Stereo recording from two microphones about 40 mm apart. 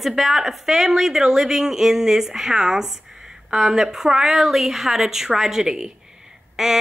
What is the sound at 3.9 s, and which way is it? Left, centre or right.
A woman's voice, centre.